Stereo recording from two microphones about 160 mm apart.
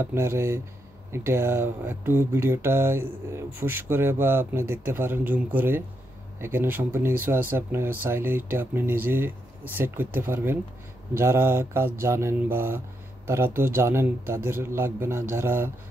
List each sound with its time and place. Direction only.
0.0 s speech: 15° right (ahead or behind)